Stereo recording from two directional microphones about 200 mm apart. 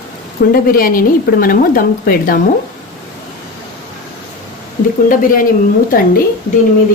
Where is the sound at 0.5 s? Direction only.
45° left (ahead or behind).